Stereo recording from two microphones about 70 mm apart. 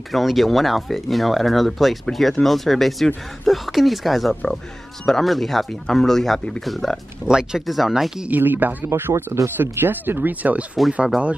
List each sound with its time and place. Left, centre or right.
0.1 s speech: centre
8.3 s speech: right
9.6 s speech: right